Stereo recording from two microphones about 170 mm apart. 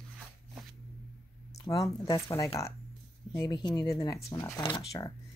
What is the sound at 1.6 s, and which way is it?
Speech, 20° left (ahead or behind).